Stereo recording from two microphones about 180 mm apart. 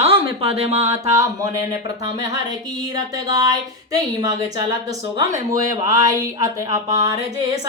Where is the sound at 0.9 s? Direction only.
20° right (ahead or behind).